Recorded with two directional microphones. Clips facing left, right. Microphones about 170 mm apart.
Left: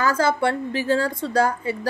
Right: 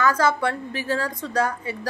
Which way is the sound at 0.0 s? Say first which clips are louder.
Left 1 dB; 30° left (ahead or behind).